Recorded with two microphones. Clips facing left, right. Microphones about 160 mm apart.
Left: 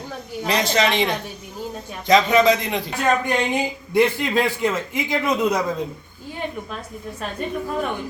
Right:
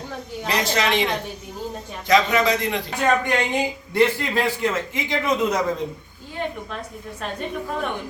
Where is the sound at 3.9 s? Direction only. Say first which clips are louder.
Left 2 dB; 15° left (ahead or behind).